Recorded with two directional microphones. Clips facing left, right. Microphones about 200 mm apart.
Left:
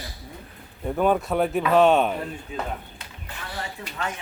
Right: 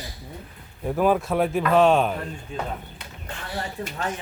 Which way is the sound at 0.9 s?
Centre (ahead or behind).